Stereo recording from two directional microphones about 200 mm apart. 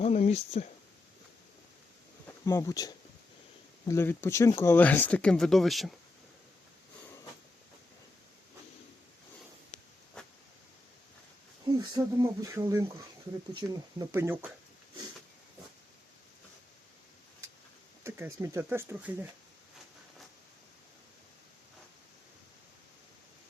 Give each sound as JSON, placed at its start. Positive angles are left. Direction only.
{"t": 0.0, "sound": "speech", "side_deg": 30}
{"t": 2.2, "sound": "speech", "side_deg": 15}
{"t": 10.2, "sound": "a sound", "side_deg": 5}
{"t": 11.8, "sound": "speech", "side_deg": -20}
{"t": 18.0, "sound": "speech", "side_deg": -15}